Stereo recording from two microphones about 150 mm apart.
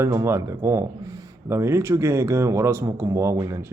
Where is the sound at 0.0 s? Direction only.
20° right (ahead or behind).